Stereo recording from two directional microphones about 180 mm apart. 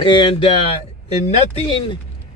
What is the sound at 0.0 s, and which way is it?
Speech, 25° left (ahead or behind).